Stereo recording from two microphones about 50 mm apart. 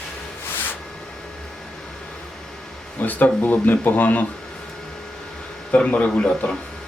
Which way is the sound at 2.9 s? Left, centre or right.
Left.